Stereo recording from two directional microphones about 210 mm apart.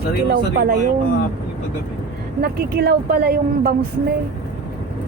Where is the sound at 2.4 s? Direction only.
50° right (ahead or behind).